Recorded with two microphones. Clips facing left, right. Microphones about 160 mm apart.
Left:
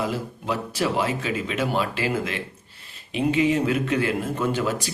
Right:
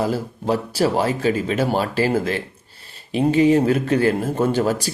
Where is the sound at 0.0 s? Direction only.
40° right (ahead or behind).